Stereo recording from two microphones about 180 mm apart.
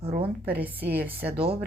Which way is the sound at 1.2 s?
55° right (ahead or behind).